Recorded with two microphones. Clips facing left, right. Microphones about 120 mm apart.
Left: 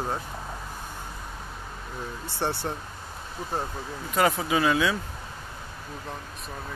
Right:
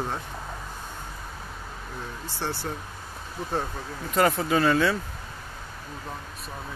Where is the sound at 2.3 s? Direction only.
20° left (ahead or behind).